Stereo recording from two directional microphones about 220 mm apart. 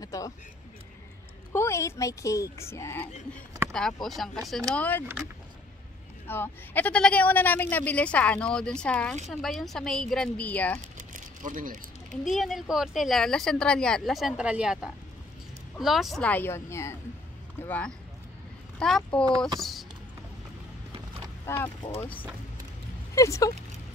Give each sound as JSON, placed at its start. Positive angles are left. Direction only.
{"t": 0.0, "sound": "a sound", "side_deg": 15}
{"t": 1.5, "sound": "a woman's voice", "side_deg": 10}
{"t": 6.2, "sound": "a woman's voice", "side_deg": 10}
{"t": 11.0, "sound": "vehicle", "side_deg": -35}
{"t": 12.3, "sound": "a woman's voice", "side_deg": 0}
{"t": 19.6, "sound": "a sound", "side_deg": 0}
{"t": 21.5, "sound": "speech", "side_deg": 10}
{"t": 23.1, "sound": "speech", "side_deg": 15}